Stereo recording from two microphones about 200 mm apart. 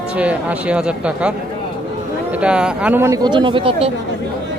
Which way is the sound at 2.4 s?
5° right (ahead or behind).